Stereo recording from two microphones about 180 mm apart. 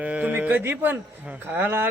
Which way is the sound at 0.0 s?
10° right (ahead or behind).